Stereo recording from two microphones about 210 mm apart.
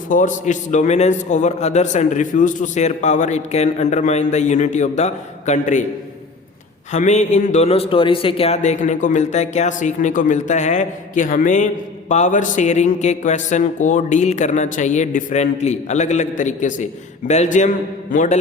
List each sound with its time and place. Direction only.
0.1 s a man's voice: 35° left (ahead or behind)
6.9 s a man's voice: 35° left (ahead or behind)